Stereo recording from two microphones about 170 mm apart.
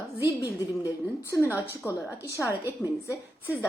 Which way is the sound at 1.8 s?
15° left (ahead or behind).